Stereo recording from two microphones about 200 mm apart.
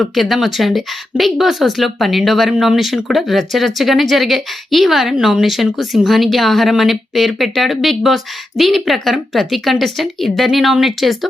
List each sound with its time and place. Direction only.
0.1 s speech: centre (ahead or behind)